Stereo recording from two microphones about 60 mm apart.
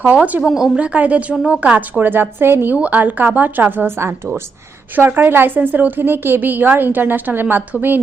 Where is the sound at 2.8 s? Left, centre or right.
Right.